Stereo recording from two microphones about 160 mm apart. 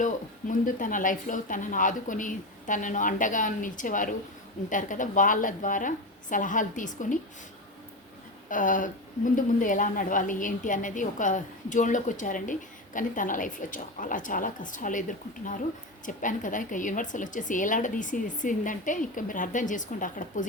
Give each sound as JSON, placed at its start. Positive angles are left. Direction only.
{"t": 0.0, "sound": "a woman's voice", "side_deg": 55}
{"t": 8.4, "sound": "a woman's voice", "side_deg": 55}